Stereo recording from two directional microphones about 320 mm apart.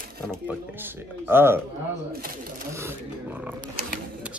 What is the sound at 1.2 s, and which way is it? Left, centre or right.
Speech, centre.